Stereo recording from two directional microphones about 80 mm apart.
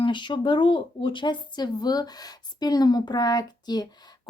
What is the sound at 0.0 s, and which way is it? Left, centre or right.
A woman's voice, left.